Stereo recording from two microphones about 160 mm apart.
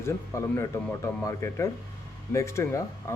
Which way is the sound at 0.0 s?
15° left (ahead or behind).